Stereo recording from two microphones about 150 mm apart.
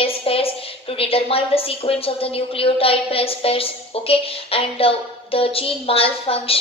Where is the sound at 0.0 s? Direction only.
40° left (ahead or behind).